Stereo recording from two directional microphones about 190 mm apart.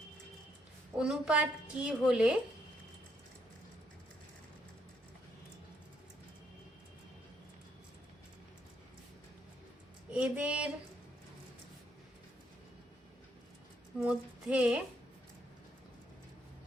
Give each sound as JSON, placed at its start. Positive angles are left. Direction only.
{"t": 0.9, "sound": "a woman's voice", "side_deg": -5}
{"t": 10.1, "sound": "a sound", "side_deg": -5}
{"t": 14.0, "sound": "a woman's voice", "side_deg": -5}